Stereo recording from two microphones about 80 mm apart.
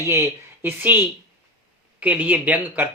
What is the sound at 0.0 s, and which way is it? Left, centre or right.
Speech, right.